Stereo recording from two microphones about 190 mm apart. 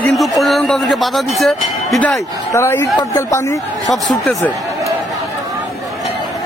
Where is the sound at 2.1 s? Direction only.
15° left (ahead or behind).